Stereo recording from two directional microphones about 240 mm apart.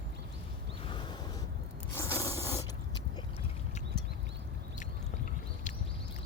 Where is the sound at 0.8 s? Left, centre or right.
Left.